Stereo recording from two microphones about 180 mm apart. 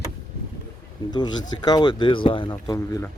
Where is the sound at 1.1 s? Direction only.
25° left (ahead or behind).